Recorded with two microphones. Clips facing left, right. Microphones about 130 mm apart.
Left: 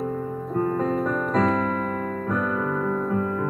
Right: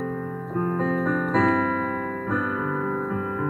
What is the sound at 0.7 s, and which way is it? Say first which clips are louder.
Music: even; 45° left (ahead or behind).